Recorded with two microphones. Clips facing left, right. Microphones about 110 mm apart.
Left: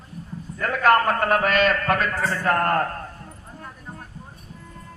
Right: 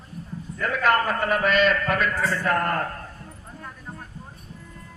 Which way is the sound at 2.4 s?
45° left (ahead or behind).